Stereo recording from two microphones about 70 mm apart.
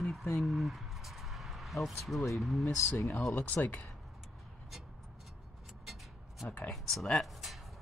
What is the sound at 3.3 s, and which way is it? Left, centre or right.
Speech, left.